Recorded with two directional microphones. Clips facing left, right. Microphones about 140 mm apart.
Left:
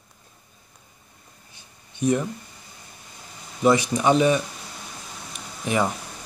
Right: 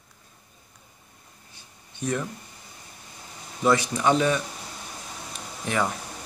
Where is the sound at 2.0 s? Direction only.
15° left (ahead or behind).